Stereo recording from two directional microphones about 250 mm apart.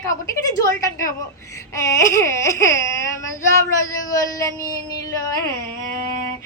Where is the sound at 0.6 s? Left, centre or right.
Centre.